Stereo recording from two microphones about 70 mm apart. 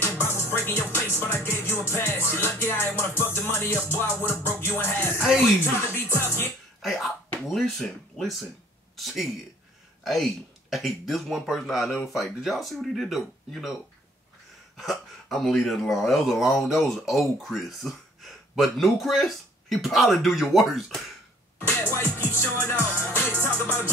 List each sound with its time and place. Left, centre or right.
0.0 s music: left
6.8 s speech: centre
14.8 s speech: centre
21.5 s music: left